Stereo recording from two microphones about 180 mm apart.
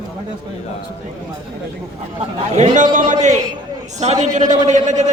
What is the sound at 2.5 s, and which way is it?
A man's voice, 40° right (ahead or behind).